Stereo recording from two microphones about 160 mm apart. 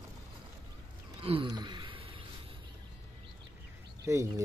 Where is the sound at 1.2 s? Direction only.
35° right (ahead or behind).